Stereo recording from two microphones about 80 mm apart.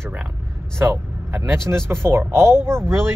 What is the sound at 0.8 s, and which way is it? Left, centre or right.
Speech, right.